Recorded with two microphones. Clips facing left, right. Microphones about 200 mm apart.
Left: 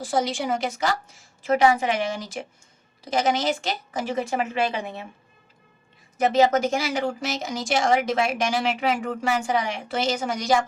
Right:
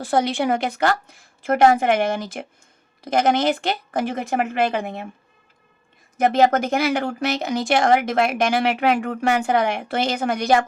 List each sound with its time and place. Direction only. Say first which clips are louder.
0.0 s speech: right 4 dB; 60° right (ahead or behind)
6.1 s speech: right 2 dB; 55° right (ahead or behind)